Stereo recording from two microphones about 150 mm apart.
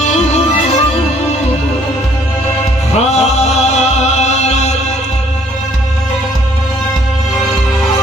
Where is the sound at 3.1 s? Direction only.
45° left (ahead or behind).